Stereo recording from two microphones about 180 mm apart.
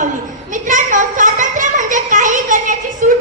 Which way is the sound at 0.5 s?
45° right (ahead or behind).